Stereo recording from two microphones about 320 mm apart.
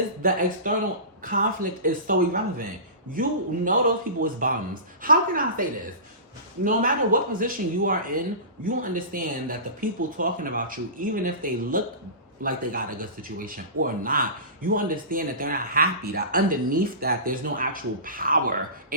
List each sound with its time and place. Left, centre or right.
0.2 s speech: right
6.7 s speech: right